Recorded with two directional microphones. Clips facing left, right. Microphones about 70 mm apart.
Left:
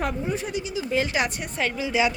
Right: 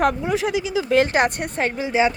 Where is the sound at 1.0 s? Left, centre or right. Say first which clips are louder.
Right 7 dB; right.